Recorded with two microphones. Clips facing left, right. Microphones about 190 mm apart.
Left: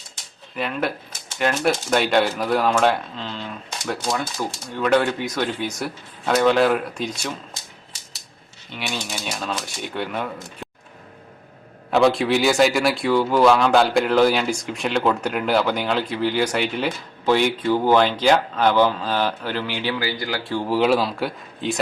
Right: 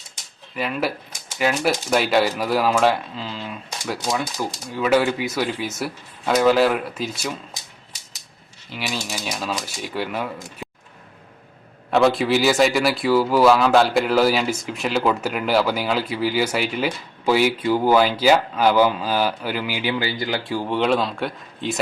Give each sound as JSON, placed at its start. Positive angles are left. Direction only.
{"t": 0.5, "sound": "a man's voice", "side_deg": -5}
{"t": 8.7, "sound": "a man's voice", "side_deg": -5}
{"t": 11.9, "sound": "a man's voice", "side_deg": 0}
{"t": 19.9, "sound": "speech", "side_deg": -20}
{"t": 20.5, "sound": "a man's voice", "side_deg": 0}